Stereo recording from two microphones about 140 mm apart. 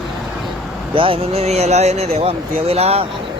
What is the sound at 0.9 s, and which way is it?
Speech, 40° right (ahead or behind).